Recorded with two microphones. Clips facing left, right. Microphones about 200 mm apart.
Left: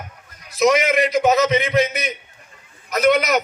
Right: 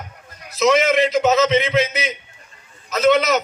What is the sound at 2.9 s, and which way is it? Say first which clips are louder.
Speech: right 1 dB; 15° left (ahead or behind).